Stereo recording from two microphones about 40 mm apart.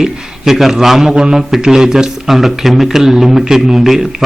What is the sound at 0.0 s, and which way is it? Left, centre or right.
A man's voice, centre.